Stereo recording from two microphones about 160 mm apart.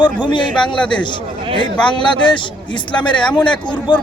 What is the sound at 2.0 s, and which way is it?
Speech, 30° left (ahead or behind).